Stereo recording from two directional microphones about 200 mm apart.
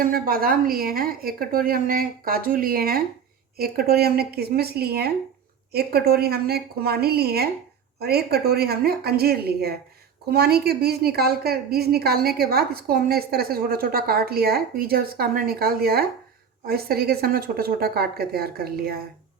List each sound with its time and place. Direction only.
0.0 s a woman's voice: 45° right (ahead or behind)